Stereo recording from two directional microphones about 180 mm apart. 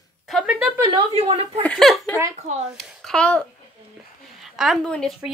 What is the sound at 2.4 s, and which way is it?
Speech, 40° right (ahead or behind).